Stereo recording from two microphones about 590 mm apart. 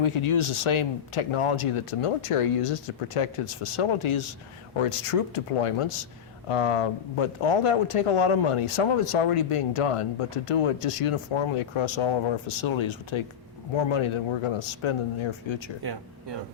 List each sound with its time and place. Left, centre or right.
0.0 s speech: left